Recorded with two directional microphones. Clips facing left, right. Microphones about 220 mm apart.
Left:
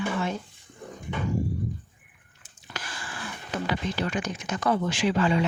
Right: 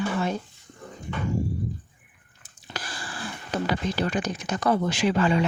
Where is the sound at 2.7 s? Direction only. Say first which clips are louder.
Right 2 dB; 35° right (ahead or behind).